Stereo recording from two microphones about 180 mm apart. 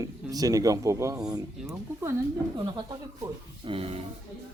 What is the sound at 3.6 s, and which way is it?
Speech, 30° right (ahead or behind).